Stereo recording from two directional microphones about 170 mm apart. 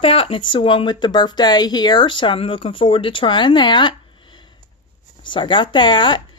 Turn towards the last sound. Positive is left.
turn(degrees=25)  # may be behind; listen again after turning